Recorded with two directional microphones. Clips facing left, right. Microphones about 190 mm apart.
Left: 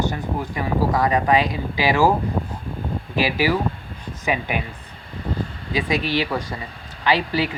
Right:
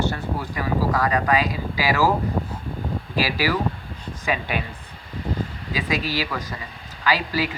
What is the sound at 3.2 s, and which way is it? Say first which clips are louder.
Speech: left 3 dB; 20° left (ahead or behind).